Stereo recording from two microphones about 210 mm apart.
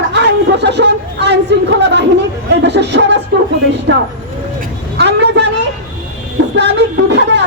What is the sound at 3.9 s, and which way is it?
Speech, 60° right (ahead or behind).